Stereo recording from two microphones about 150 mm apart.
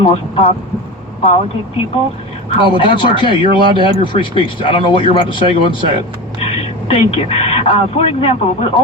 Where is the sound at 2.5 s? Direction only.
35° left (ahead or behind).